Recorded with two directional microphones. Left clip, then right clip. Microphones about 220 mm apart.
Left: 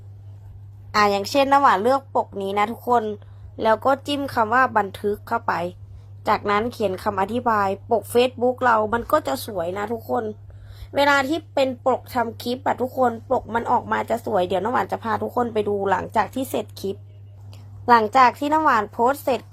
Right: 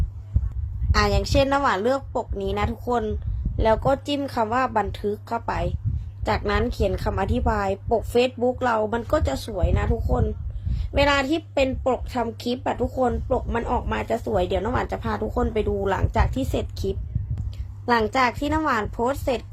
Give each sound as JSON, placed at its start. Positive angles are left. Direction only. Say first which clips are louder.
{"t": 0.9, "sound": "a woman's voice", "louder": "left 4 dB", "side_deg": 15}